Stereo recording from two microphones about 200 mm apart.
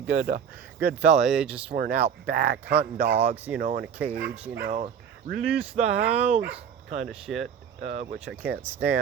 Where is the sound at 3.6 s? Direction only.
45° right (ahead or behind).